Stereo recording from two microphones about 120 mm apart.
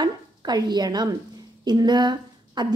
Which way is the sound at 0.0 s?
35° right (ahead or behind).